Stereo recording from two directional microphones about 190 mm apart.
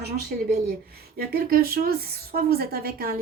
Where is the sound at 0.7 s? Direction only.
50° right (ahead or behind).